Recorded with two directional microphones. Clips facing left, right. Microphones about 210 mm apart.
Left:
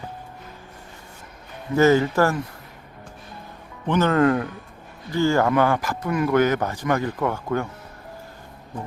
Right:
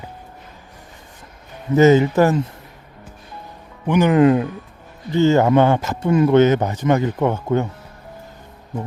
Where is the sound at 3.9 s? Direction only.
15° right (ahead or behind).